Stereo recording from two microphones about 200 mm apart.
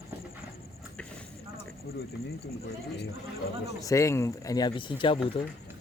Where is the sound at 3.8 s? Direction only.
15° left (ahead or behind).